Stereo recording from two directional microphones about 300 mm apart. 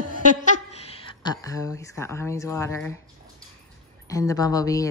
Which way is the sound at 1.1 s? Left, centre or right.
Centre.